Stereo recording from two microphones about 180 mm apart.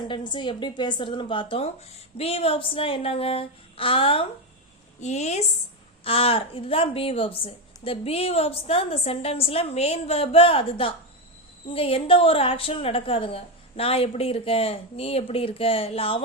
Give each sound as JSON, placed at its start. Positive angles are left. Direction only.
{"t": 0.1, "sound": "a woman's voice", "side_deg": 25}